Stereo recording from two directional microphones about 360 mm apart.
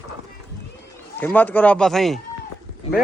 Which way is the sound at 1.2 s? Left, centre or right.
Centre.